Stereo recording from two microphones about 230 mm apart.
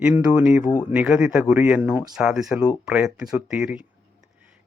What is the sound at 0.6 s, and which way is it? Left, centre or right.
Speech, centre.